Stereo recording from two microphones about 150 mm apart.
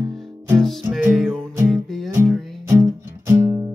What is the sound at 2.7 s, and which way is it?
Music, 20° right (ahead or behind).